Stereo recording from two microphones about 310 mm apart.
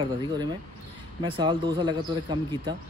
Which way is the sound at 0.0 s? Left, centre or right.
Centre.